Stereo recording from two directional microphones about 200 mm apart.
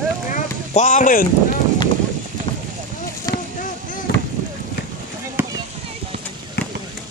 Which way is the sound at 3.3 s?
20° left (ahead or behind).